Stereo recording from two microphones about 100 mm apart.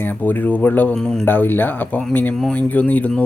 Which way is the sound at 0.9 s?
5° left (ahead or behind).